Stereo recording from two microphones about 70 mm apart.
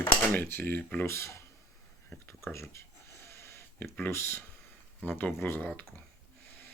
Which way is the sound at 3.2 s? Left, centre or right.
Left.